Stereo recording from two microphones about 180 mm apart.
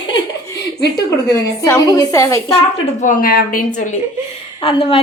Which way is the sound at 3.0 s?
50° left (ahead or behind).